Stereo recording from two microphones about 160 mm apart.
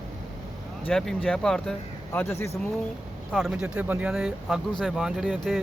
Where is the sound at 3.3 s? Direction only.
Centre (ahead or behind).